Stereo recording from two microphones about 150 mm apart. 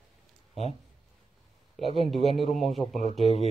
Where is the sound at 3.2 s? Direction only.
45° left (ahead or behind).